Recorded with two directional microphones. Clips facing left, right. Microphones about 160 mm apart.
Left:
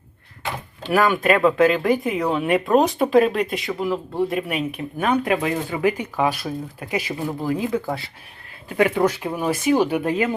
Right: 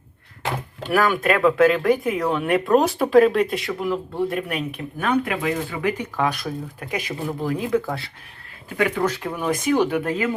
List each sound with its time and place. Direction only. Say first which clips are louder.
0.9 s speech: left 2 dB; centre (ahead or behind)
5.2 s speech: left 3 dB; 25° left (ahead or behind)
6.1 s speech: left 2 dB; 10° left (ahead or behind)